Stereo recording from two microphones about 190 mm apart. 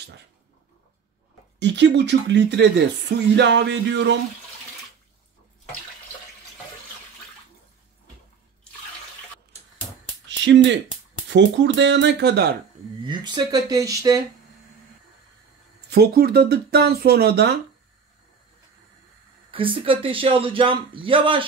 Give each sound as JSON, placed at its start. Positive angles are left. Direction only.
{"t": 1.6, "sound": "speech", "side_deg": -65}
{"t": 10.2, "sound": "a sound", "side_deg": -70}
{"t": 11.2, "sound": "speech", "side_deg": -70}
{"t": 13.0, "sound": "speech", "side_deg": -25}
{"t": 15.9, "sound": "speech", "side_deg": -55}
{"t": 19.5, "sound": "speech", "side_deg": -30}